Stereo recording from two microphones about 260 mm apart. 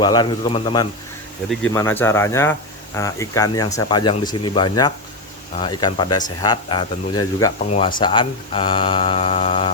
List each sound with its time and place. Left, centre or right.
0.0 s speech: centre
1.5 s speech: centre
7.7 s speech: left
8.0 s speech: centre